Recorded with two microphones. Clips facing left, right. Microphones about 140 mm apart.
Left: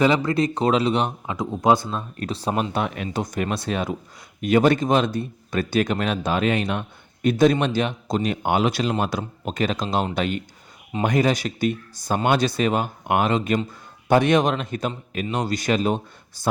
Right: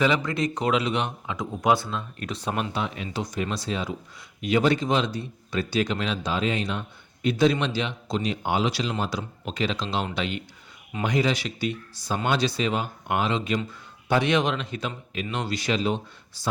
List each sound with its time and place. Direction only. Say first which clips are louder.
0.0 s speech: left 4 dB; 35° left (ahead or behind)
2.7 s speech: left 4 dB; 55° left (ahead or behind)